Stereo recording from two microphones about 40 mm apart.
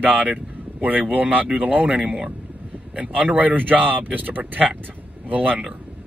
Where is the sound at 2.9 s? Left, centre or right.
Right.